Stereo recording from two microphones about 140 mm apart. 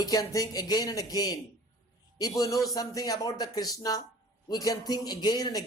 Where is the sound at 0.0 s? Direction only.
25° left (ahead or behind).